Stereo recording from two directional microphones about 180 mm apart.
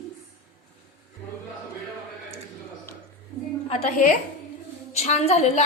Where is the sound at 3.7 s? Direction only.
35° left (ahead or behind).